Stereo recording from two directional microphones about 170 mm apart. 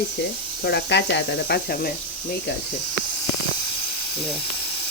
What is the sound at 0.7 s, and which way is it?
Speech, 80° left.